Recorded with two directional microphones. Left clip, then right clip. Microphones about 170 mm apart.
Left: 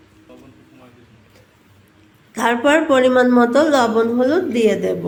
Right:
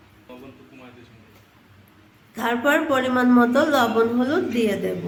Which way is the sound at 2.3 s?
30° left (ahead or behind).